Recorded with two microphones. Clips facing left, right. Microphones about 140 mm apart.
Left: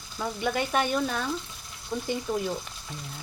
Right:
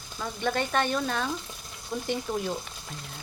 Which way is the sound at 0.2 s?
10° left (ahead or behind).